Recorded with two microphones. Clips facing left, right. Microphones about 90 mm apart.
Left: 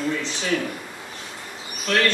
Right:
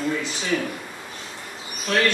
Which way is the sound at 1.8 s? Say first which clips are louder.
Even; 15° right (ahead or behind).